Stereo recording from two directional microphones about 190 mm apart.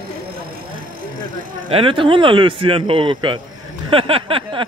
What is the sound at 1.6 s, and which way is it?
Speech, 30° right (ahead or behind).